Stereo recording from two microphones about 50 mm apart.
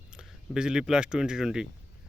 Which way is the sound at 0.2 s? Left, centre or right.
Centre.